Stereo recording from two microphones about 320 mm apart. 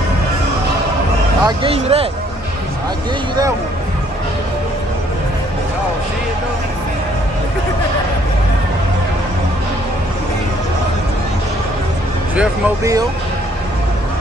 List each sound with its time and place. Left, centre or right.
1.4 s speech: centre
12.4 s speech: centre